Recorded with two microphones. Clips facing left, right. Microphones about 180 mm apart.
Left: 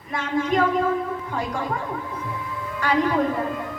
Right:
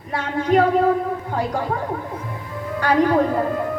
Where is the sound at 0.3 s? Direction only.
35° right (ahead or behind).